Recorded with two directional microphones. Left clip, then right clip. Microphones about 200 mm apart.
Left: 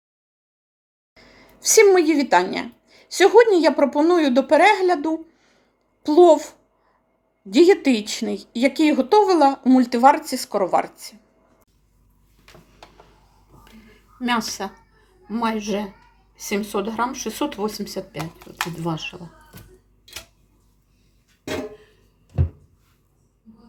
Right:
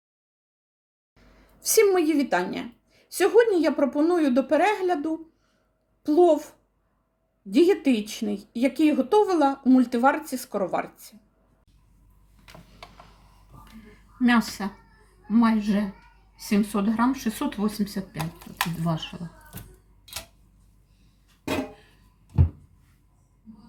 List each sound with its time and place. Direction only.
1.1 s speech: 10° right (ahead or behind)
14.3 s speech: 40° left (ahead or behind)